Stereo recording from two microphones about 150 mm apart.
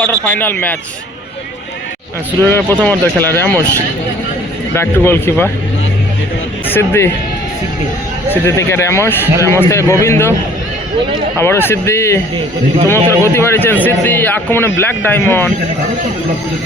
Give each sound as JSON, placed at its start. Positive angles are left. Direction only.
{"t": 0.0, "sound": "speech", "side_deg": 10}
{"t": 2.4, "sound": "speech", "side_deg": 15}
{"t": 4.7, "sound": "speech", "side_deg": 15}
{"t": 6.7, "sound": "speech", "side_deg": 15}
{"t": 8.3, "sound": "speech", "side_deg": 15}
{"t": 11.3, "sound": "speech", "side_deg": 15}
{"t": 13.2, "sound": "speech", "side_deg": 15}